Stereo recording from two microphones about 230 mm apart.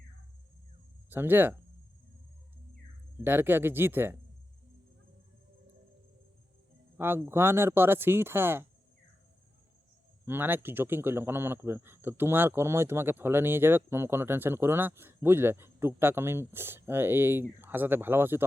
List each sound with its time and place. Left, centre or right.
1.1 s speech: centre
3.2 s speech: centre
6.9 s speech: centre
10.2 s speech: centre